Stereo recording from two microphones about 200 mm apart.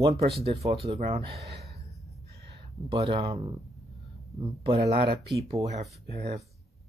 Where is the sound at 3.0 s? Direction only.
20° right (ahead or behind).